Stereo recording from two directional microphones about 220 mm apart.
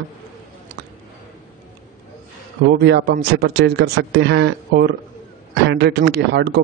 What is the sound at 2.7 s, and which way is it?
A man's voice, 50° right (ahead or behind).